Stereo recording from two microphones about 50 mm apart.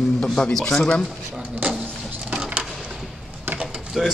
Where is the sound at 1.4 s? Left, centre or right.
Right.